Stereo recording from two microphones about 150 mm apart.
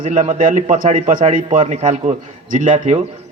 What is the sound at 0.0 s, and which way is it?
A man's voice, 55° right (ahead or behind).